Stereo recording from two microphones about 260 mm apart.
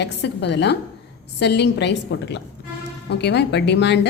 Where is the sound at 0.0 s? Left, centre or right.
Left.